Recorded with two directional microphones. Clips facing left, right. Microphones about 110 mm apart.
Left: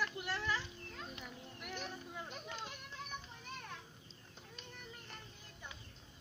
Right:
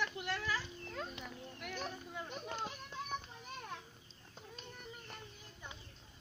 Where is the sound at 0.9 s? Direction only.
70° right (ahead or behind).